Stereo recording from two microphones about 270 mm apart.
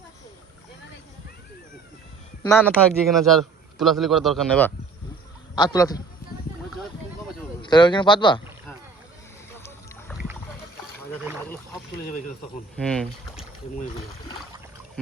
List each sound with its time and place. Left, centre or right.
2.4 s a man's voice: centre
5.5 s speech: centre
7.6 s speech: centre
9.6 s boat: centre
12.7 s a man's voice: centre